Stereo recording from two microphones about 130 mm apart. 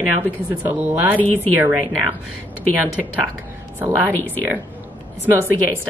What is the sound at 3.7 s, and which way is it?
Speech, 15° right (ahead or behind).